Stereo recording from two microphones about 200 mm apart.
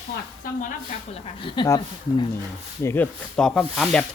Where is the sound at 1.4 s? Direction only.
20° left (ahead or behind).